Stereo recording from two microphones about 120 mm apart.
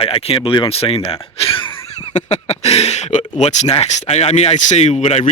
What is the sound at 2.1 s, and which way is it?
Speech, 70° left (ahead or behind).